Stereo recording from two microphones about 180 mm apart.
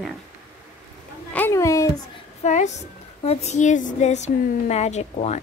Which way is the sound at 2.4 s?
40° left (ahead or behind).